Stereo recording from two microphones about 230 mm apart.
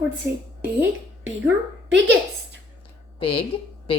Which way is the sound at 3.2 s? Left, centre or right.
Left.